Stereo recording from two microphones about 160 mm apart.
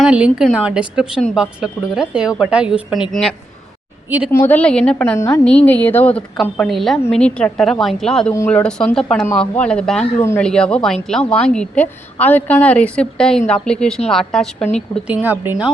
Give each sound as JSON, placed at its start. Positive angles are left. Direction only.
{"t": 0.0, "sound": "a woman's voice", "side_deg": -5}
{"t": 5.1, "sound": "a woman's voice", "side_deg": 15}
{"t": 10.2, "sound": "a woman's voice", "side_deg": 15}
{"t": 10.4, "sound": "a woman's voice", "side_deg": 5}
{"t": 15.0, "sound": "a woman's voice", "side_deg": -10}